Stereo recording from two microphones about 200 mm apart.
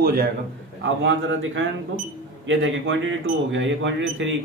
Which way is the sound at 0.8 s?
70° right (ahead or behind).